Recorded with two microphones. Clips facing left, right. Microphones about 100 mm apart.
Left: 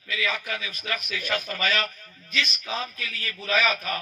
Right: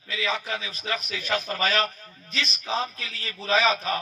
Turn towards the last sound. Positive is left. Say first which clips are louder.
# right 2 dB
turn(degrees=-25)  # may be behind; listen again after turning